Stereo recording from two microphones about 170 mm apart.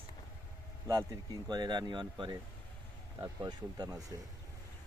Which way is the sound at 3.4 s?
25° right (ahead or behind).